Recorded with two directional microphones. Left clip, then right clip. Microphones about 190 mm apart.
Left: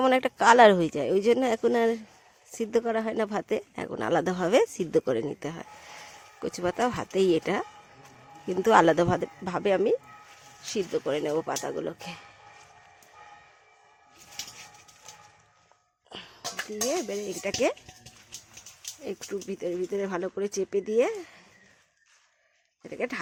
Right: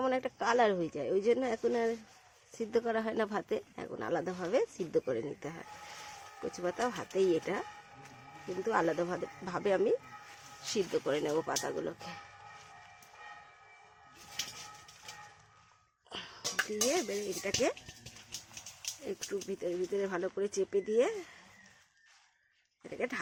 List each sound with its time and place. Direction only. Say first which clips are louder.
0.0 s speech: left 11 dB; 40° left (ahead or behind); by 3.6 s 25° left (ahead or behind)
3.8 s speech: left 9 dB; 35° left (ahead or behind)
8.6 s speech: left 12 dB; 45° left (ahead or behind); by 12.1 s 25° left (ahead or behind)
16.0 s a sound: left 1 dB; 15° left (ahead or behind)
16.9 s speech: left 3 dB; 25° left (ahead or behind)
19.0 s speech: left 4 dB; 30° left (ahead or behind)
22.8 s speech: left 5 dB; 30° left (ahead or behind)